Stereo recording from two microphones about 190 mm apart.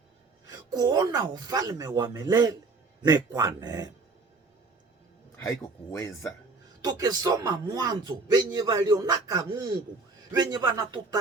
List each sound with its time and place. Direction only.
0.4 s speech: 20° right (ahead or behind)
5.4 s speech: 15° left (ahead or behind)
6.8 s speech: 20° right (ahead or behind)